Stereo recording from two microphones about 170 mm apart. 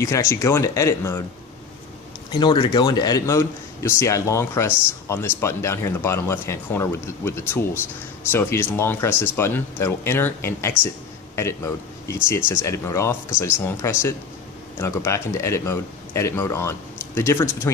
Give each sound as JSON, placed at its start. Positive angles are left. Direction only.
{"t": 0.0, "sound": "a man's voice", "side_deg": 15}
{"t": 2.3, "sound": "a man's voice", "side_deg": 25}